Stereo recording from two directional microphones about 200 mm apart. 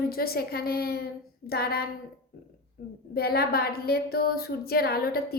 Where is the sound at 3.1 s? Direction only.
50° left (ahead or behind).